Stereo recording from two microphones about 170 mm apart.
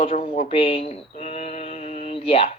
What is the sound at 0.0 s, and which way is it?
Speech, 35° left (ahead or behind).